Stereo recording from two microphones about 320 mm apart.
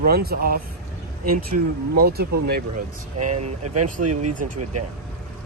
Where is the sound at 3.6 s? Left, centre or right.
Right.